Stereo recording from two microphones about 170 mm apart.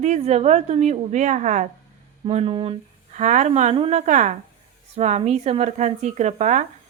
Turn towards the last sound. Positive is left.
turn(degrees=-45)  # may be behind; listen again after turning